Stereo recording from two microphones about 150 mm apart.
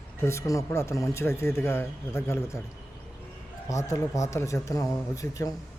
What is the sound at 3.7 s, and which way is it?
Speech, 20° left (ahead or behind).